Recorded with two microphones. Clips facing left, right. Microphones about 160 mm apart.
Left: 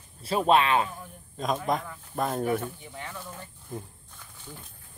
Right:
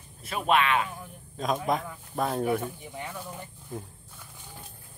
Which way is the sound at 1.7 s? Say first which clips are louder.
Even; centre (ahead or behind).